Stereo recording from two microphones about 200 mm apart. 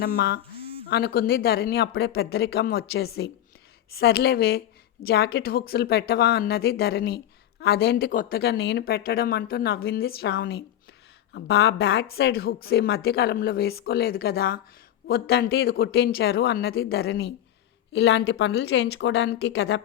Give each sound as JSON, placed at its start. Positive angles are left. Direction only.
{"t": 0.0, "sound": "a woman's voice", "side_deg": 50}